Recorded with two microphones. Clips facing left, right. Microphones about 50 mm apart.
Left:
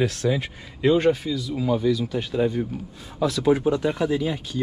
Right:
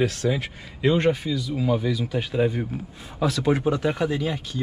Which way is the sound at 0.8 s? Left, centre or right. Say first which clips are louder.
Left 2 dB; centre.